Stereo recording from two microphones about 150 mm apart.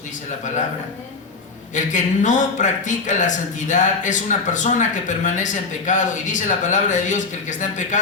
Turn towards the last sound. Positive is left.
turn(degrees=55)  # may be behind; listen again after turning